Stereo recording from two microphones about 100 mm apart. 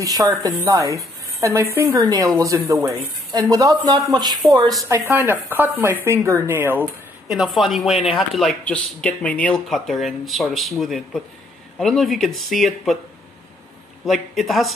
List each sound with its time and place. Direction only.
0.0 s a woman's voice: 35° right (ahead or behind)
2.0 s a woman's voice: 40° right (ahead or behind)
4.8 s speech: 25° right (ahead or behind)
7.2 s speech: centre (ahead or behind)
8.6 s speech: 15° left (ahead or behind)
9.7 s speech: centre (ahead or behind)
14.0 s speech: centre (ahead or behind)